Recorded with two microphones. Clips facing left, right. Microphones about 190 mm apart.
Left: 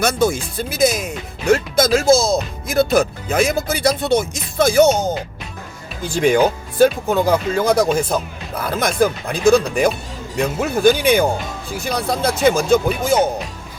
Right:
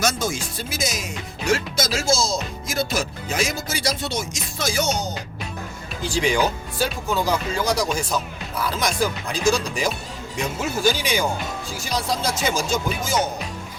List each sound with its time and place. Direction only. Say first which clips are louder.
0.0 s speech: left 7 dB; 60° left (ahead or behind)